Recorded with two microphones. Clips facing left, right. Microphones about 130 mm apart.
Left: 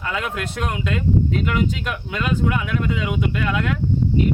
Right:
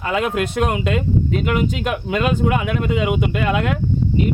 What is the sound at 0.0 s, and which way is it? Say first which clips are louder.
A man's voice: right 6 dB; 20° right (ahead or behind).